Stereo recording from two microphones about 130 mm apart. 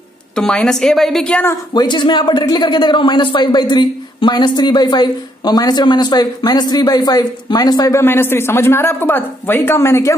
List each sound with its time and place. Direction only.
0.4 s a woman's voice: 5° left (ahead or behind)
1.8 s a man's voice: 35° left (ahead or behind)
8.0 s speech: 15° left (ahead or behind)